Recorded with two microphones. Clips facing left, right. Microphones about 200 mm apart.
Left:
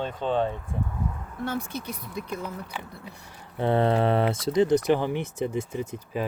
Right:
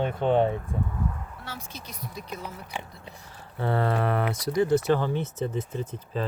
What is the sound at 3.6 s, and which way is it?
Speech, 20° left (ahead or behind).